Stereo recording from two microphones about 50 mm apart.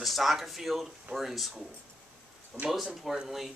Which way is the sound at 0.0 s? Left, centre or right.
Centre.